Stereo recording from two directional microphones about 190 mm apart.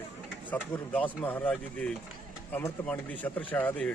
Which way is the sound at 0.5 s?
10° left (ahead or behind).